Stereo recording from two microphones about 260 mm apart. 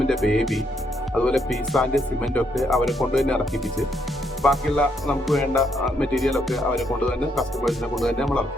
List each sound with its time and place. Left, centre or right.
0.1 s speech: centre